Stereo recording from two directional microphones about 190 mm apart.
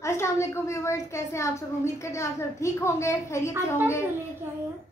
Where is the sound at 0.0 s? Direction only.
15° left (ahead or behind).